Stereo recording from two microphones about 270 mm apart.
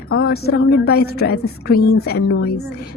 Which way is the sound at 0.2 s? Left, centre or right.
Left.